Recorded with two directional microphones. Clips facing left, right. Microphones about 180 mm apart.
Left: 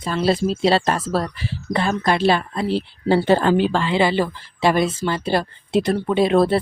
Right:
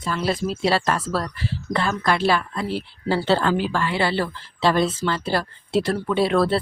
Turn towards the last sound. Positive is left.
turn(degrees=20)  # may be behind; listen again after turning